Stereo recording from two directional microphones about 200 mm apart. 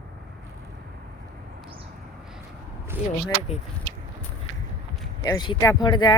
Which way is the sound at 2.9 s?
10° right (ahead or behind).